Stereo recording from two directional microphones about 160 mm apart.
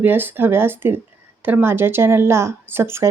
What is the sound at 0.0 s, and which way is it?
Speech, 10° right (ahead or behind).